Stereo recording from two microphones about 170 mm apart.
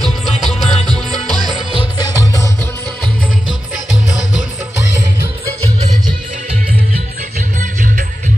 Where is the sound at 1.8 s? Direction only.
25° left (ahead or behind).